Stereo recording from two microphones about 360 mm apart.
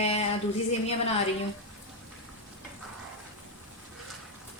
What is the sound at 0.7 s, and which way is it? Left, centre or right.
Speech, centre.